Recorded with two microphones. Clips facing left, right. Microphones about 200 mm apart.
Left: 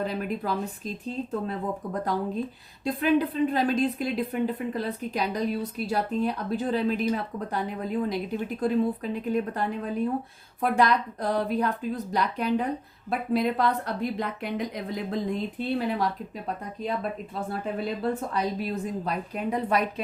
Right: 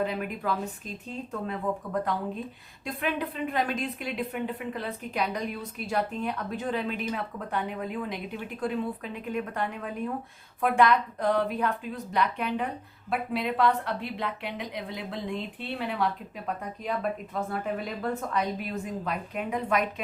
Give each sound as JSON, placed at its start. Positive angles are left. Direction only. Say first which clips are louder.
{"t": 0.0, "sound": "speech", "louder": "left 1 dB", "side_deg": 35}
{"t": 17.5, "sound": "speech", "louder": "left 5 dB", "side_deg": 30}